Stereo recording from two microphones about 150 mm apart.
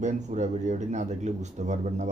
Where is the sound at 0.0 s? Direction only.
50° right (ahead or behind).